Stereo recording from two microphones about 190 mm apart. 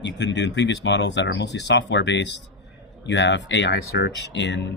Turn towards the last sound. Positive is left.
turn(degrees=70)  # may be behind; listen again after turning